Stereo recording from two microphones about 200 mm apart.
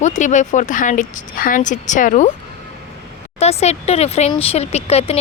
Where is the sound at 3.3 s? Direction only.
30° left (ahead or behind).